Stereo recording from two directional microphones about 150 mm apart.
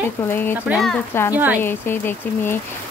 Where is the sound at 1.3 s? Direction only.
10° right (ahead or behind).